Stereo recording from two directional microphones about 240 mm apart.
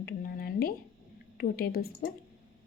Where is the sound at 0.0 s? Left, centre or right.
Left.